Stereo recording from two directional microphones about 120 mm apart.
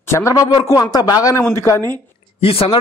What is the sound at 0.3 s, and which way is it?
A man's voice, 30° left (ahead or behind).